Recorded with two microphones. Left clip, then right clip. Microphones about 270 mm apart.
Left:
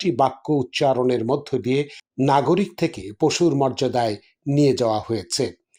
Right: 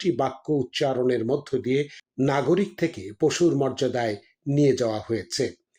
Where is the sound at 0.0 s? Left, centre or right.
Centre.